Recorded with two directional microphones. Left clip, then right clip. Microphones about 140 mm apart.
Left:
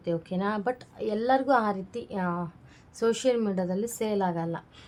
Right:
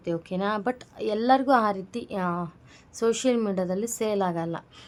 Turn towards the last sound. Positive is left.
turn(degrees=-40)  # may be behind; listen again after turning